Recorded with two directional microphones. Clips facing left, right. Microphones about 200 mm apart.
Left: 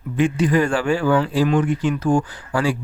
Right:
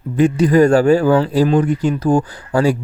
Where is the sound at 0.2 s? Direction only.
40° right (ahead or behind).